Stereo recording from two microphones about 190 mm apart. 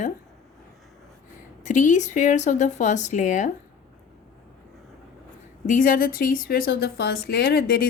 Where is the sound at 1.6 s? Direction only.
40° left (ahead or behind).